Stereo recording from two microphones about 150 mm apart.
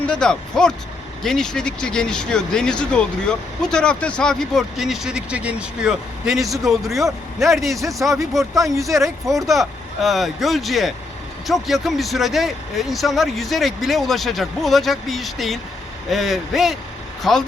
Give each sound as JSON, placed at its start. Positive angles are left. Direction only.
{"t": 0.0, "sound": "speech", "side_deg": 5}
{"t": 8.0, "sound": "speech", "side_deg": -15}
{"t": 9.5, "sound": "speech", "side_deg": 0}